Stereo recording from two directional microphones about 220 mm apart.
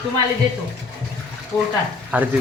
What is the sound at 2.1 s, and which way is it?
Speech, 5° right (ahead or behind).